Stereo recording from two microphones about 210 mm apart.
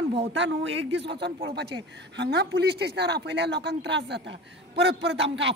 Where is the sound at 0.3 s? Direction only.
60° right (ahead or behind).